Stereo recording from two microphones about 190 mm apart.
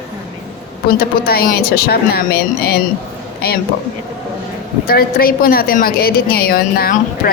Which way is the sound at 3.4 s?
55° left (ahead or behind).